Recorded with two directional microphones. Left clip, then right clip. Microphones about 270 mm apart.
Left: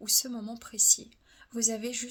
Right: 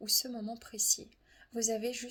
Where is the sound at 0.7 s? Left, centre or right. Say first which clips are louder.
Left 7 dB; left.